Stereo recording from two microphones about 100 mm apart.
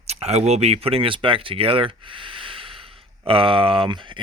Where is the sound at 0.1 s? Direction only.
90° right.